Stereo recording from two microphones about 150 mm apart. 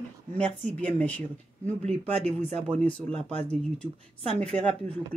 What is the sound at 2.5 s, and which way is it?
Speech, 50° right (ahead or behind).